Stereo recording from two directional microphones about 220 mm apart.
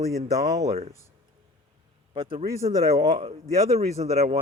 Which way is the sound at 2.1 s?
25° right (ahead or behind).